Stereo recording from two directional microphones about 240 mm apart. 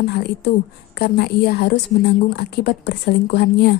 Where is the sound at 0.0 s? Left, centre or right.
Left.